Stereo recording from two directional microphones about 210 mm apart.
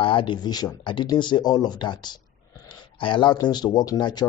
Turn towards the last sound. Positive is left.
turn(degrees=20)  # may be behind; listen again after turning